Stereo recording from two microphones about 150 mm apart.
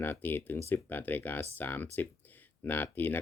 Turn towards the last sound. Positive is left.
turn(degrees=15)  # may be behind; listen again after turning